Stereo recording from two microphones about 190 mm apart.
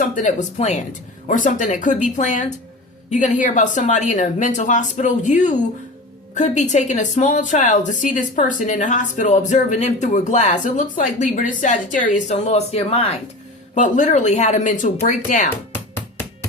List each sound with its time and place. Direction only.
0.0 s a woman's voice: 40° left (ahead or behind)